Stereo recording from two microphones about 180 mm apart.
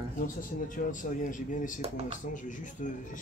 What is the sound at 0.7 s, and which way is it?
Speech, 45° left (ahead or behind).